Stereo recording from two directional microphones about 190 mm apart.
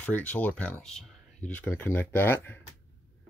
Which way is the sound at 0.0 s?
10° left (ahead or behind).